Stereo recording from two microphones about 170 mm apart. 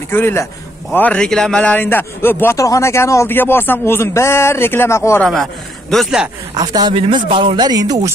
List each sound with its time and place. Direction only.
0.1 s a man's voice: 15° left (ahead or behind)
5.2 s a man's voice: centre (ahead or behind)
6.5 s speech: 25° right (ahead or behind)